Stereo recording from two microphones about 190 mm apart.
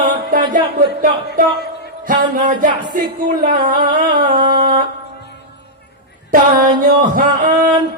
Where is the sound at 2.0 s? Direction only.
45° right (ahead or behind).